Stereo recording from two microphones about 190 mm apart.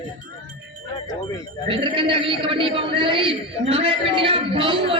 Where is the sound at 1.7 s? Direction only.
25° right (ahead or behind).